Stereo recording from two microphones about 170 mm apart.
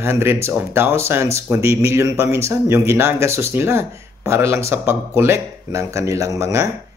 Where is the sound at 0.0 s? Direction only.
15° right (ahead or behind).